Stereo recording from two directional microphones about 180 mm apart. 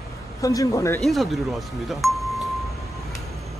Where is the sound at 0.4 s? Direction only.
20° left (ahead or behind).